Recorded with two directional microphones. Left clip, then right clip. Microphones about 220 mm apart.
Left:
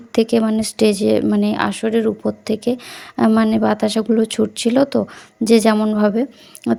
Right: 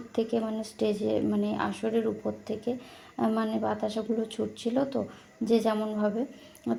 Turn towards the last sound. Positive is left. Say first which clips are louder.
# left 12 dB
turn(degrees=35)  # may be behind; listen again after turning